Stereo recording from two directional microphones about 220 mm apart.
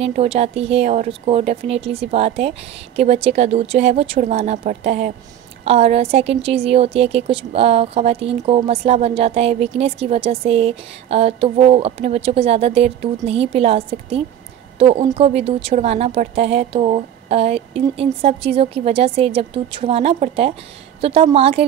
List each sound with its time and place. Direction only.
0.0 s a woman's voice: 30° right (ahead or behind)